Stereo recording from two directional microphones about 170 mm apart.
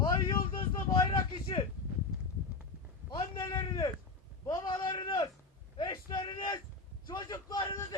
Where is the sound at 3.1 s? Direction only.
25° left (ahead or behind).